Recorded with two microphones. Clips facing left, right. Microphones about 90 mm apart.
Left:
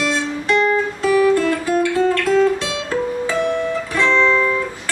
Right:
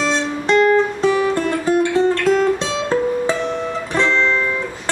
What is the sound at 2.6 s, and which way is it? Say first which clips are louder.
Guitar: right 3 dB; 20° right (ahead or behind).